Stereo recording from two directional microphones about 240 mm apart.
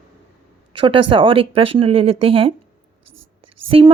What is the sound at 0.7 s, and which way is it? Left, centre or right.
Speech, right.